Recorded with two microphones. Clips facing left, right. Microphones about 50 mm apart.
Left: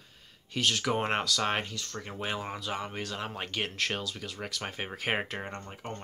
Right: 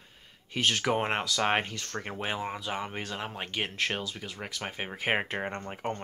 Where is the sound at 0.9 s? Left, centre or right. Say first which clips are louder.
Right 1 dB; centre; by 2.1 s right.